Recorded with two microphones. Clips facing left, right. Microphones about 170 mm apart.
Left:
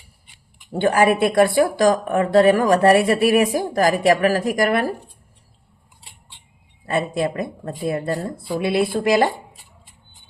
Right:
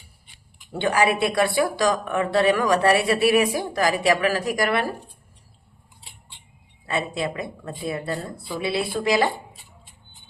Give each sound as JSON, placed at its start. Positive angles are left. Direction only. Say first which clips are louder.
{"t": 0.7, "sound": "a woman's voice", "louder": "left 4 dB", "side_deg": 45}
{"t": 6.8, "sound": "a woman's voice", "louder": "left 5 dB", "side_deg": 45}